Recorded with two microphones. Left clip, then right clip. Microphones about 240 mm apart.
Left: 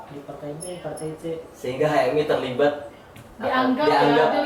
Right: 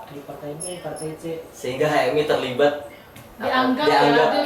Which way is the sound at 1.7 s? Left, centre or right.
Centre.